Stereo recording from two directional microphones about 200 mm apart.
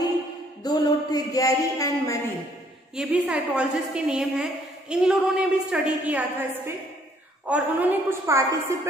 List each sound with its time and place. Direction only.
0.7 s speech: 20° left (ahead or behind)
3.0 s a woman's voice: 5° right (ahead or behind)